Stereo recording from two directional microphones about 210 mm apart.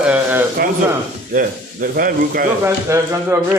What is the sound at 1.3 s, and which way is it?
Speech, 40° right (ahead or behind).